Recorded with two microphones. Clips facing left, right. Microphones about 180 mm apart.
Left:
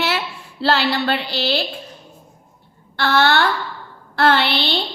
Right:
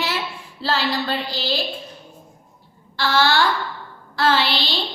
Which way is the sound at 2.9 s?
60° left (ahead or behind).